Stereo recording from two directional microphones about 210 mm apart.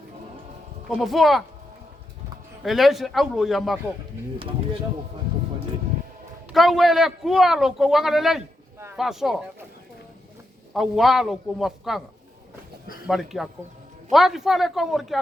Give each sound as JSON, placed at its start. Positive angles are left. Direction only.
{"t": 0.9, "sound": "a man's voice", "side_deg": 0}
{"t": 2.6, "sound": "a man's voice", "side_deg": 0}
{"t": 4.4, "sound": "speech", "side_deg": -25}
{"t": 6.5, "sound": "a man's voice", "side_deg": 0}
{"t": 10.8, "sound": "a man's voice", "side_deg": 0}
{"t": 13.1, "sound": "a man's voice", "side_deg": 0}